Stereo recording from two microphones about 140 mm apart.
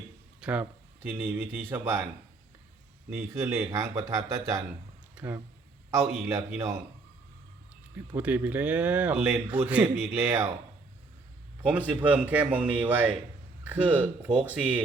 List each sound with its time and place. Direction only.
0.3 s speech: 10° right (ahead or behind)
3.1 s speech: 15° right (ahead or behind)
7.9 s speech: 15° right (ahead or behind)
11.9 s speech: 10° right (ahead or behind)